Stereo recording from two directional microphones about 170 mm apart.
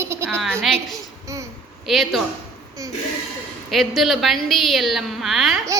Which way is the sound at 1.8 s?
Centre (ahead or behind).